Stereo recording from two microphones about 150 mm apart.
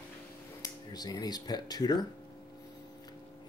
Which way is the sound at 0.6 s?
25° left (ahead or behind).